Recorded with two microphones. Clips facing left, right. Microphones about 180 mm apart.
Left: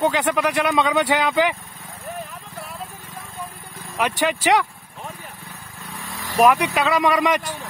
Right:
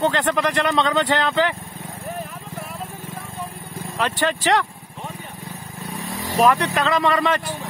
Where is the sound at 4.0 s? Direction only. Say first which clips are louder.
Left 1 dB; 10° left (ahead or behind).